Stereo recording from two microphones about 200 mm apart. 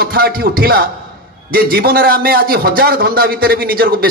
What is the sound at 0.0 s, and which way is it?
A man's voice, 50° right (ahead or behind).